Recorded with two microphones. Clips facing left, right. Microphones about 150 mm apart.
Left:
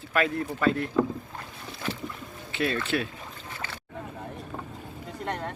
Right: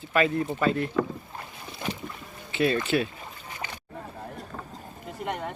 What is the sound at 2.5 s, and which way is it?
Boat, centre (ahead or behind).